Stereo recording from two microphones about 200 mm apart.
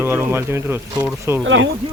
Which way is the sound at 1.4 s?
70° right (ahead or behind).